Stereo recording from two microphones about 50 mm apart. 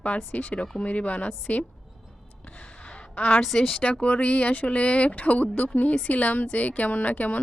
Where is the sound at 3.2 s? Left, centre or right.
Left.